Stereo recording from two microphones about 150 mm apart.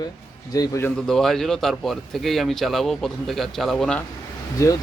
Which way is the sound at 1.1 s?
Centre (ahead or behind).